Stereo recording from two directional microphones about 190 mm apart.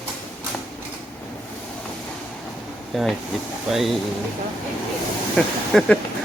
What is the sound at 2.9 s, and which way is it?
Speech, centre (ahead or behind).